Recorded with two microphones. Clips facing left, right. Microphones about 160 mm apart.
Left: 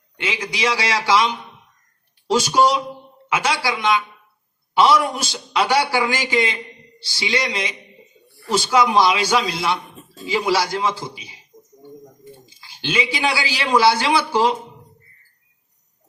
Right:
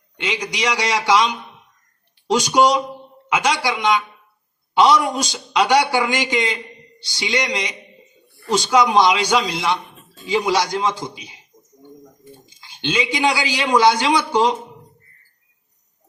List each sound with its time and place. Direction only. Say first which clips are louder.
0.2 s a man's voice: even; 15° right (ahead or behind)
12.5 s a man's voice: right 2 dB; 20° right (ahead or behind)